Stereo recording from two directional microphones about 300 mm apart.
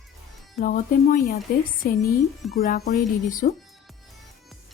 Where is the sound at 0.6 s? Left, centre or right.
Left.